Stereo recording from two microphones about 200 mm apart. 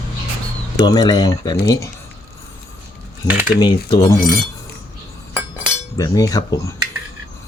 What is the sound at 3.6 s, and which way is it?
Speech, 20° left (ahead or behind).